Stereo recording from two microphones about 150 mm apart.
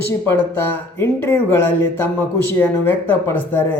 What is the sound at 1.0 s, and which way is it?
Speech, 15° left (ahead or behind).